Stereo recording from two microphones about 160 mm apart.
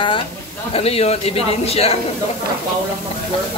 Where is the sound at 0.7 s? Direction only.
40° left (ahead or behind).